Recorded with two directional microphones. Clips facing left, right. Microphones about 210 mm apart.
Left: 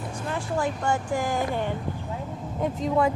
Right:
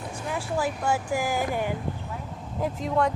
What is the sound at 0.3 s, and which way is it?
Speech, 5° right (ahead or behind).